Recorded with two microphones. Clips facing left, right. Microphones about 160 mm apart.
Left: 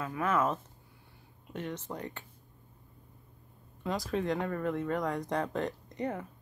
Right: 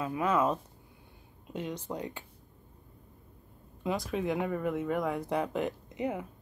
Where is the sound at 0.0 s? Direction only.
15° right (ahead or behind).